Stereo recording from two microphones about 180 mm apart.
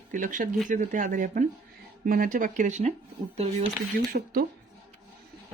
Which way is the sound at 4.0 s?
50° right (ahead or behind).